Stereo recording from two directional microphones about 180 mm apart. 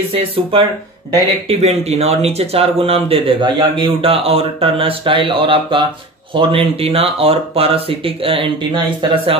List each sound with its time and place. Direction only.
0.1 s speech: 30° right (ahead or behind)